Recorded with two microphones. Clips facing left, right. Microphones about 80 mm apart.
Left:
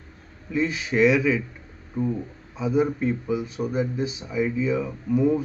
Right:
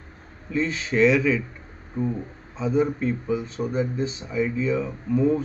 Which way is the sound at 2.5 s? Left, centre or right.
Centre.